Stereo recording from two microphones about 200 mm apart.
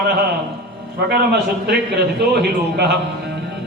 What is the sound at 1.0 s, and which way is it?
Speech, 55° right (ahead or behind).